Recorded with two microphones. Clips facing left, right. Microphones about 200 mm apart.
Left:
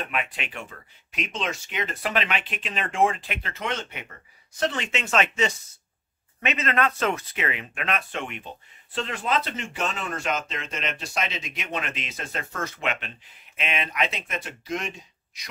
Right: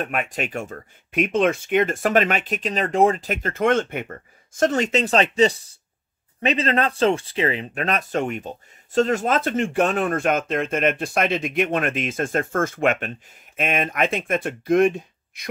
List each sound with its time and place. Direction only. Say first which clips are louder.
0.0 s speech: right 6 dB; 45° right (ahead or behind)